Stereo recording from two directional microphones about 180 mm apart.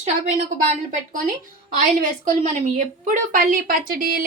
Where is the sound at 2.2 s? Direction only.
45° right (ahead or behind).